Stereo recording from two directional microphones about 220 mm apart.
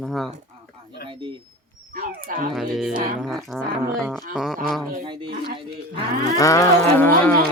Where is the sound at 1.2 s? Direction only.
25° right (ahead or behind).